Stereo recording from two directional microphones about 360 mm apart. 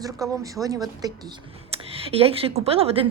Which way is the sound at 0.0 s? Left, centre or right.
Centre.